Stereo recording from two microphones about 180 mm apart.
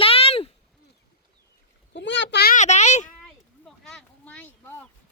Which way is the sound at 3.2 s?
5° left (ahead or behind).